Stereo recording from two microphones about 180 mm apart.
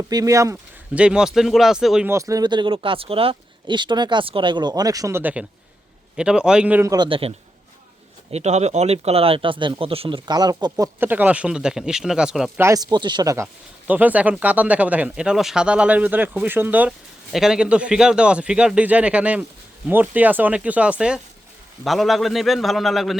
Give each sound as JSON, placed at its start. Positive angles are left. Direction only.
{"t": 0.1, "sound": "speech", "side_deg": -20}
{"t": 0.9, "sound": "speech", "side_deg": -5}
{"t": 2.0, "sound": "speech", "side_deg": -15}
{"t": 6.9, "sound": "speech", "side_deg": -25}
{"t": 12.6, "sound": "speech", "side_deg": -20}